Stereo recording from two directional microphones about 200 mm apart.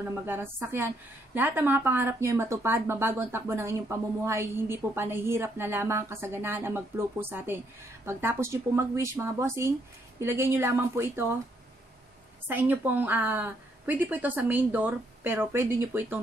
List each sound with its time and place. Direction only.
0.2 s speech: 10° right (ahead or behind)
12.4 s speech: 10° right (ahead or behind)